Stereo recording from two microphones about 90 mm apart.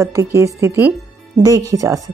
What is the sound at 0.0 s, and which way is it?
Speech, 35° right (ahead or behind).